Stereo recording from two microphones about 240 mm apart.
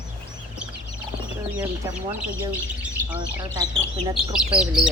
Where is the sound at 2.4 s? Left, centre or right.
Centre.